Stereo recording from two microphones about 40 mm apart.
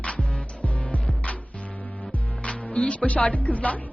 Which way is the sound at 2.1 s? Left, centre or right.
Left.